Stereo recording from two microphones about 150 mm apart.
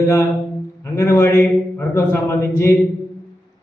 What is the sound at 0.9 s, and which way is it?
A man's voice, 20° left (ahead or behind).